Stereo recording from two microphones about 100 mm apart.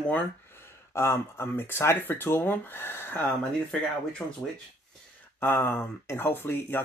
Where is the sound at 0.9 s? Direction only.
25° left (ahead or behind).